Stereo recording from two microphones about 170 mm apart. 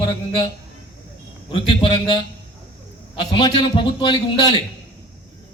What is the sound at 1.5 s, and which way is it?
Speech, 30° left (ahead or behind).